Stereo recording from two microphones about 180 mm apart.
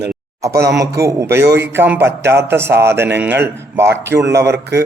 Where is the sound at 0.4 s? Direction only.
20° right (ahead or behind).